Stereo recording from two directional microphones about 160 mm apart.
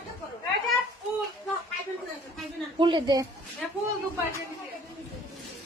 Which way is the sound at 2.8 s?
30° right (ahead or behind).